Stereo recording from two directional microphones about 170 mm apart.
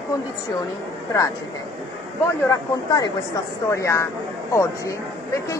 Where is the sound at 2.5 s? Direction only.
25° left (ahead or behind).